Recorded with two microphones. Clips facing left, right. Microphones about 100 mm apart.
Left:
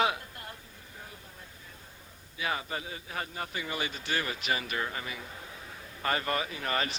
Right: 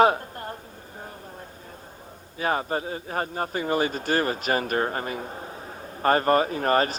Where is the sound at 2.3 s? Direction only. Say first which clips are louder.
Right 8 dB; 45° right (ahead or behind).